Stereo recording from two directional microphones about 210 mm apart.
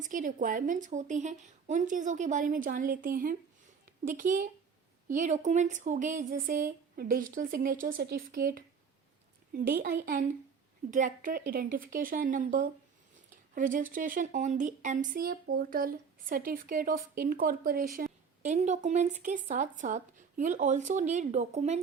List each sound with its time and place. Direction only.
0.0 s a woman's voice: 40° right (ahead or behind)
18.5 s speech: 35° right (ahead or behind)